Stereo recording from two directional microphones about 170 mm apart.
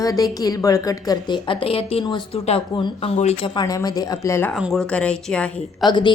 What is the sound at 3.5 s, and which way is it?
Speech, 20° left (ahead or behind).